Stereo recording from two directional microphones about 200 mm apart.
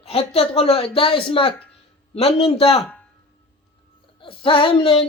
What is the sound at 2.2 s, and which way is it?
Speech, 30° left (ahead or behind).